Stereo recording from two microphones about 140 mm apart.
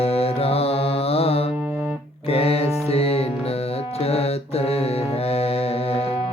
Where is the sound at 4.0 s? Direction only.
45° left (ahead or behind).